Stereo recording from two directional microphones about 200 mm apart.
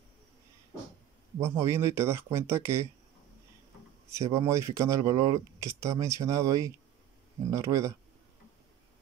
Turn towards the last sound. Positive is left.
turn(degrees=-15)  # may be behind; listen again after turning